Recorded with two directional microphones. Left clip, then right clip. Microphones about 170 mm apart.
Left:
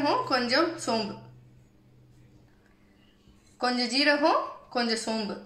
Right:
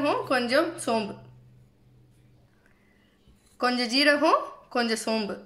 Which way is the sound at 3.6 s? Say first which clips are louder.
Right 2 dB; 50° right (ahead or behind).